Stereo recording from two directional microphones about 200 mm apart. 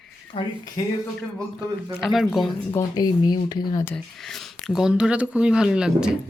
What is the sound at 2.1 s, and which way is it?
Speech, centre (ahead or behind).